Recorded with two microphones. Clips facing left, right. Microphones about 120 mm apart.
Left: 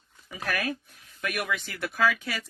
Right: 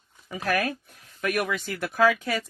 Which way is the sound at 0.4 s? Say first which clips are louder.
Right 4 dB; 45° right (ahead or behind).